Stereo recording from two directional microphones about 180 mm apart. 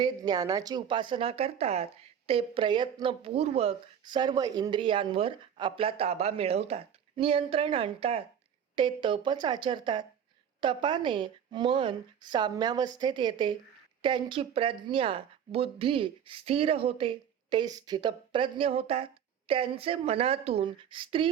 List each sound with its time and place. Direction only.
0.0 s a woman's voice: 20° right (ahead or behind)